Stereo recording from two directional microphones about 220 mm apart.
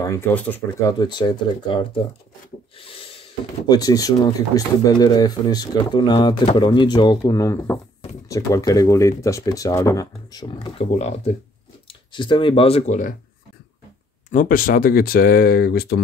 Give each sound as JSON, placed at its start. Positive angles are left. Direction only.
{"t": 0.0, "sound": "speech", "side_deg": 10}
{"t": 0.9, "sound": "speech", "side_deg": 20}
{"t": 3.6, "sound": "speech", "side_deg": 15}
{"t": 14.3, "sound": "speech", "side_deg": 40}